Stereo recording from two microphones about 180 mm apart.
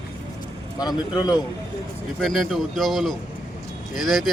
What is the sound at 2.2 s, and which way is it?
Speech, centre (ahead or behind).